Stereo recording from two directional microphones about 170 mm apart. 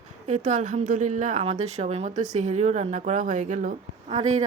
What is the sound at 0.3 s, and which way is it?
A woman's voice, 45° right (ahead or behind).